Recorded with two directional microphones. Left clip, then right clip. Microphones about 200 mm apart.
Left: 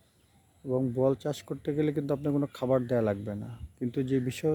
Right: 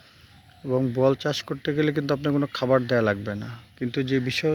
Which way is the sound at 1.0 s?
10° left (ahead or behind).